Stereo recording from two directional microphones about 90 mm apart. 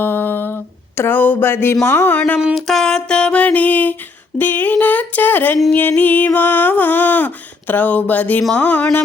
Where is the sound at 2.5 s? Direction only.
5° left (ahead or behind); by 3.9 s 20° left (ahead or behind).